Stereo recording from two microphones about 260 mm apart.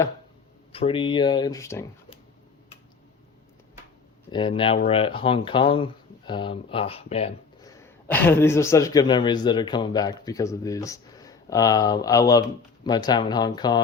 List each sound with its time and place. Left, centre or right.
0.7 s speech: left
4.3 s speech: centre
7.6 s speech: centre